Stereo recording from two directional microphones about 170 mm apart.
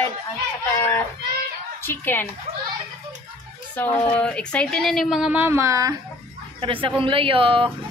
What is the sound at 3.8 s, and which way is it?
A woman's voice, 10° left (ahead or behind).